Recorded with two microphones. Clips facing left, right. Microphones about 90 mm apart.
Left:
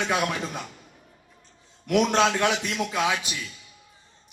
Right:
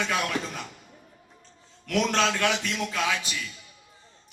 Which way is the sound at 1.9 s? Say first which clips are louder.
Left 4 dB; 20° left (ahead or behind).